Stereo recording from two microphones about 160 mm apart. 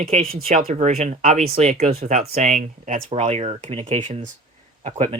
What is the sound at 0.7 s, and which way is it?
Speech, 40° right (ahead or behind).